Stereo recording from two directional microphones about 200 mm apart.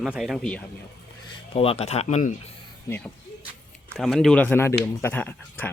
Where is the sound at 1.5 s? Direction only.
30° left (ahead or behind).